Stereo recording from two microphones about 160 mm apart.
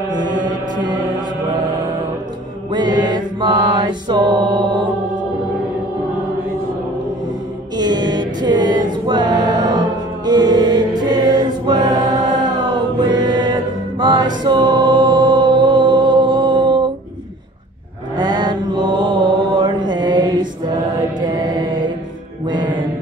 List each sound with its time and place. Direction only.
0.1 s mantra: 25° right (ahead or behind)
2.7 s mantra: 25° right (ahead or behind)
7.7 s music: 25° right (ahead or behind)
18.1 s mantra: 25° right (ahead or behind)